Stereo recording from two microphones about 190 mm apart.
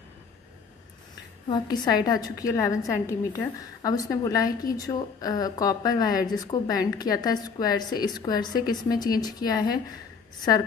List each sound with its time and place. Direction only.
1.5 s a woman's voice: 20° left (ahead or behind)